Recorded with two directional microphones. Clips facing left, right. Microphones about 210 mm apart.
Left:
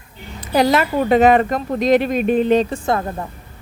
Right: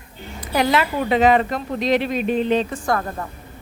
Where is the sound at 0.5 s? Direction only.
40° left (ahead or behind).